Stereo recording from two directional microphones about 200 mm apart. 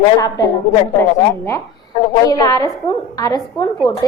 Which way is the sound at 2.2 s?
20° left (ahead or behind).